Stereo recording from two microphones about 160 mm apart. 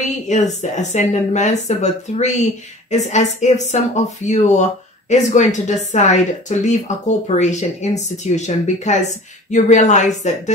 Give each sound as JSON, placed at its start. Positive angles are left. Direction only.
{"t": 0.3, "sound": "speech", "side_deg": 50}